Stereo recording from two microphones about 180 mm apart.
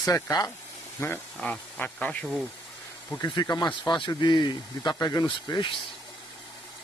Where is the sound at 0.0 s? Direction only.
20° left (ahead or behind).